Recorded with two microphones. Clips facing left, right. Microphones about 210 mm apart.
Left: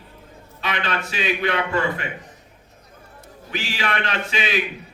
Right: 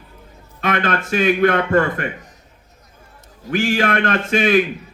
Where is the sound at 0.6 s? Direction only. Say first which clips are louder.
Right 6 dB; 50° right (ahead or behind).